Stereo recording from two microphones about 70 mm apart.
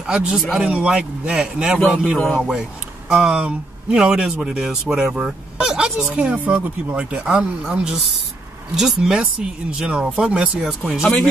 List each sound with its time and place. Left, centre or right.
0.0 s speech: centre
2.1 s speech: left
3.1 s speech: centre